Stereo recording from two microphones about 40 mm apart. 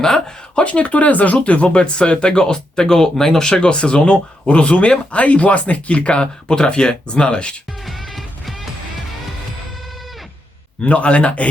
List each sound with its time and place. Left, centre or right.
0.0 s speech: centre
0.6 s speech: left; by 3.5 s centre
3.5 s speech: left
7.9 s music: centre
10.8 s speech: left